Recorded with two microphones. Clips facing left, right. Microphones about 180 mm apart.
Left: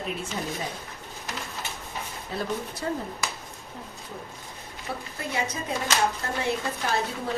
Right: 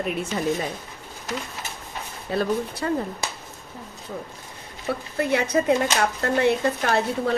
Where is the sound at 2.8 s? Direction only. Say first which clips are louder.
Right 4 dB; 80° right.